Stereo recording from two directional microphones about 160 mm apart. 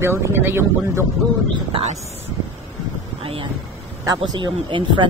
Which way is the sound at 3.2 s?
35° right (ahead or behind).